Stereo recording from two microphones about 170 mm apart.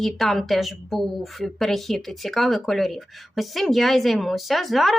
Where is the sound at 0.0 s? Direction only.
Centre (ahead or behind).